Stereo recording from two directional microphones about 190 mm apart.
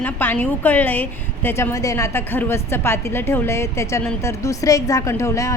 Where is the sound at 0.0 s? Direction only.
10° left (ahead or behind).